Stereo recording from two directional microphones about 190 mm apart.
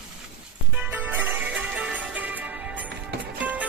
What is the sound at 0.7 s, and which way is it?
Music, 10° right (ahead or behind).